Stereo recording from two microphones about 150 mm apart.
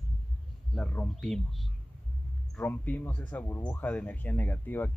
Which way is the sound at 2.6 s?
10° left (ahead or behind).